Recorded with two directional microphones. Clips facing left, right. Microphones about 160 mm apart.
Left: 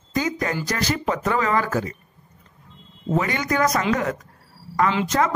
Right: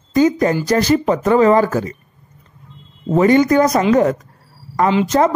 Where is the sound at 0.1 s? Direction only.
30° right (ahead or behind).